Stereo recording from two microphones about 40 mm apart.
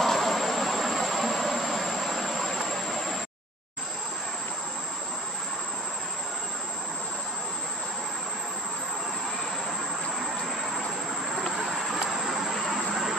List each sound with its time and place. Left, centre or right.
0.0 s vehicle: centre
12.1 s vehicle: centre